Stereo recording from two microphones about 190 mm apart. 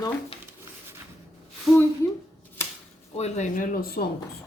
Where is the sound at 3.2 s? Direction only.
40° left (ahead or behind).